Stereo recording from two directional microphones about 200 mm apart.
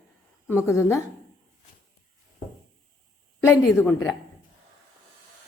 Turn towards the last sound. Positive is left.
turn(degrees=10)  # may be behind; listen again after turning